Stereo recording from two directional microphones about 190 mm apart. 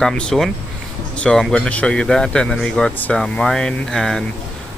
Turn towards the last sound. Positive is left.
turn(degrees=5)  # may be behind; listen again after turning